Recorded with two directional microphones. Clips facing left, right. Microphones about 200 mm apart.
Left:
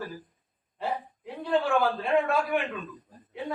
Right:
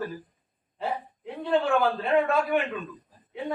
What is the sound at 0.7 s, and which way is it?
A man's voice, centre (ahead or behind).